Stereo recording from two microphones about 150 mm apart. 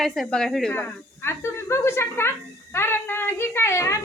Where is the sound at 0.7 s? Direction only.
15° left (ahead or behind).